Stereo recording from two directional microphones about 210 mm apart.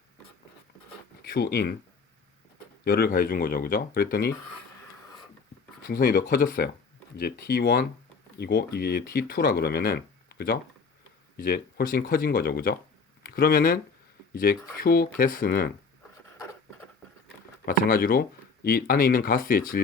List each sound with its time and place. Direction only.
1.2 s speech: 50° left (ahead or behind)
2.8 s speech: 45° left (ahead or behind)
5.9 s speech: 45° left (ahead or behind)
17.7 s speech: 40° left (ahead or behind)